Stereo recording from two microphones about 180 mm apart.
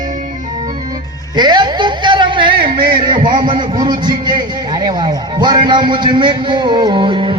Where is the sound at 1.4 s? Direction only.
25° right (ahead or behind).